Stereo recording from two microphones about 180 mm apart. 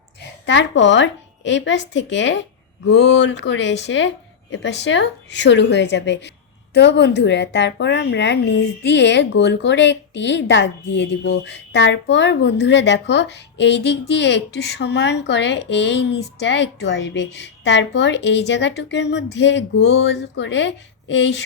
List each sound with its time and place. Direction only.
0.4 s speech: 85° left
2.8 s speech: 70° left (ahead or behind); by 21.4 s 90° left